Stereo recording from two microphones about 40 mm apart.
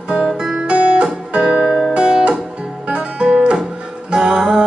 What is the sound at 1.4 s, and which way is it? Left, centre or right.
Music, centre.